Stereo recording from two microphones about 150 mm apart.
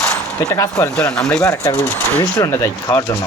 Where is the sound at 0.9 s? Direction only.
5° left (ahead or behind).